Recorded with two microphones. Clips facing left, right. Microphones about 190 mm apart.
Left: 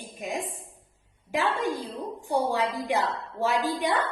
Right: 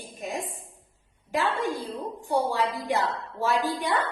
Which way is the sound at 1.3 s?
15° left (ahead or behind).